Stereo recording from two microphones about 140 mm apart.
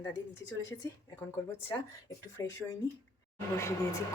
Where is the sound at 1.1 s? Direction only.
15° left (ahead or behind).